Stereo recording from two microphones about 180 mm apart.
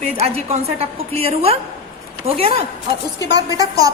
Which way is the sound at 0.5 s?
35° right (ahead or behind).